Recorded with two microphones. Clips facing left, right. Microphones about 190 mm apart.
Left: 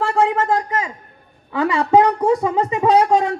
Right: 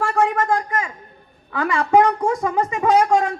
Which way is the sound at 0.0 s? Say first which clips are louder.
Left 2 dB; 20° left (ahead or behind).